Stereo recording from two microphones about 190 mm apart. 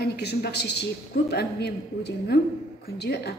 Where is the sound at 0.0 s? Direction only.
60° left (ahead or behind).